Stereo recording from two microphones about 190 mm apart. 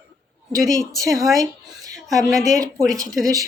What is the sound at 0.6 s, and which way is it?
Speech, 15° right (ahead or behind).